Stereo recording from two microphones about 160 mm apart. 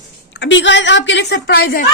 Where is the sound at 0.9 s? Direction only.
90° left.